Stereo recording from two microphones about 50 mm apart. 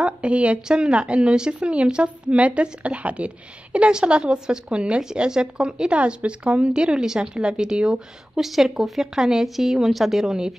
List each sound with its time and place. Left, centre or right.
0.0 s a woman's voice: right
8.4 s speech: centre